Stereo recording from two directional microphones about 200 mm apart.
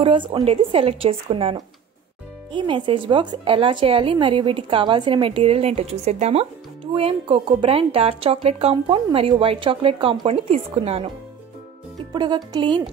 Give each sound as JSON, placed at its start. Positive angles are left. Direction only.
{"t": 0.0, "sound": "speech", "side_deg": -25}
{"t": 12.1, "sound": "speech", "side_deg": -20}